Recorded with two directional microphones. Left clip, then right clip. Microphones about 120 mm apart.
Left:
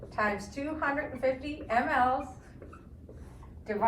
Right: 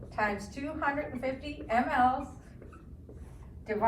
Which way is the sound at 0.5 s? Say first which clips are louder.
Left 1 dB; 10° left (ahead or behind).